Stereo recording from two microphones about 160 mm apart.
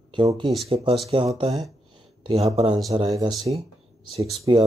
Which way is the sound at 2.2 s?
35° right (ahead or behind).